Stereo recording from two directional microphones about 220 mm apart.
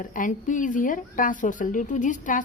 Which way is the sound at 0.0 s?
35° left (ahead or behind).